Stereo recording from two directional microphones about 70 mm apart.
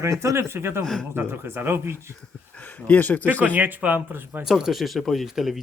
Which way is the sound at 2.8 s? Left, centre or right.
Left.